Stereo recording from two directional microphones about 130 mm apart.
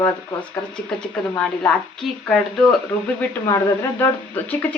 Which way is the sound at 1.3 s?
5° left (ahead or behind).